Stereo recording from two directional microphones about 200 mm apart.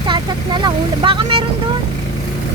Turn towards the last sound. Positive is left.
turn(degrees=-25)  # may be behind; listen again after turning